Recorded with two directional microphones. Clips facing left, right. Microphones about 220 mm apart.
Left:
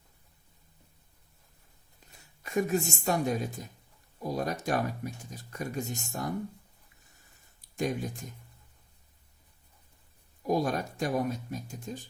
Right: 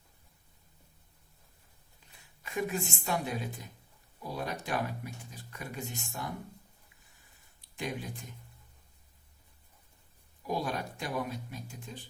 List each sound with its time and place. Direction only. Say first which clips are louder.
2.4 s speech: left 6 dB; 45° left (ahead or behind)
7.6 s speech: left 6 dB; 45° left (ahead or behind)
10.4 s speech: left 6 dB; 45° left (ahead or behind)